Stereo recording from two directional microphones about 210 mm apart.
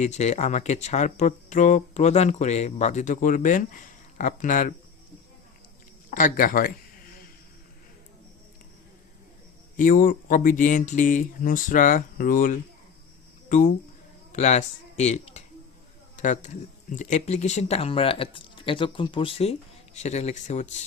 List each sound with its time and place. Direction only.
0.0 s speech: 35° left (ahead or behind)
6.1 s speech: 35° left (ahead or behind)
9.7 s speech: 40° left (ahead or behind)